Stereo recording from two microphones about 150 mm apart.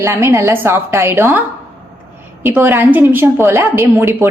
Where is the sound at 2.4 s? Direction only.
15° right (ahead or behind).